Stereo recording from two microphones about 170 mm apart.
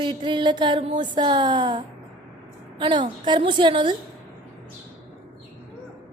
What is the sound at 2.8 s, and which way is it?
A woman's voice, 30° right (ahead or behind).